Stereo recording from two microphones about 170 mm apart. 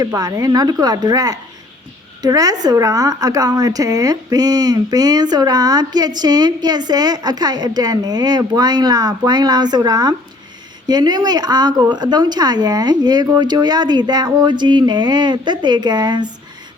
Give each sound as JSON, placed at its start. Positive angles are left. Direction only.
{"t": 0.0, "sound": "a woman's voice", "side_deg": -20}